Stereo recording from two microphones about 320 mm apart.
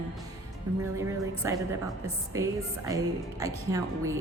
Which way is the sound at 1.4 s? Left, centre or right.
Centre.